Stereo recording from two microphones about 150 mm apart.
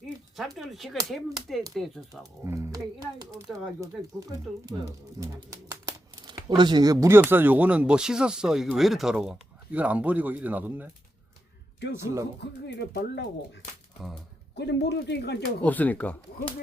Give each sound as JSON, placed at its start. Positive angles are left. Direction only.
{"t": 0.3, "sound": "a sound", "side_deg": 0}
{"t": 1.1, "sound": "speech", "side_deg": 0}
{"t": 2.4, "sound": "speech", "side_deg": -20}
{"t": 7.2, "sound": "speech", "side_deg": -15}
{"t": 11.9, "sound": "speech", "side_deg": -20}
{"t": 12.8, "sound": "speech", "side_deg": 90}
{"t": 14.5, "sound": "speech", "side_deg": 90}
{"t": 15.6, "sound": "speech", "side_deg": 10}